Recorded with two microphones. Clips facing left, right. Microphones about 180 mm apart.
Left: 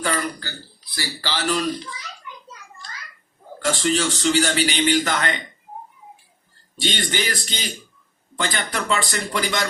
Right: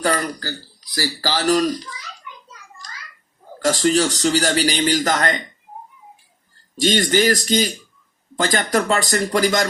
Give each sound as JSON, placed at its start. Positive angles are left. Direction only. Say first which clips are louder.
{"t": 0.0, "sound": "a man's voice", "louder": "right 4 dB", "side_deg": -40}
{"t": 3.6, "sound": "a man's voice", "louder": "right 4 dB", "side_deg": -40}
{"t": 6.7, "sound": "a man's voice", "louder": "right 8 dB", "side_deg": -40}